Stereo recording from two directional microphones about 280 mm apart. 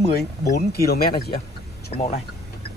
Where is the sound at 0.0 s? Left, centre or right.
Left.